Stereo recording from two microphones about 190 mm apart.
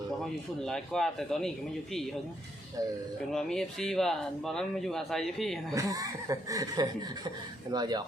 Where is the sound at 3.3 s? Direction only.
Centre (ahead or behind).